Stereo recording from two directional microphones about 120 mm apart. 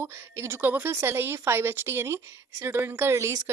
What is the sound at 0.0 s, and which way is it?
A woman's voice, 20° right (ahead or behind).